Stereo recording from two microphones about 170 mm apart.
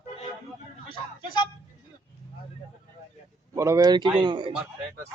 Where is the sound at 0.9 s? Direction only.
30° left (ahead or behind).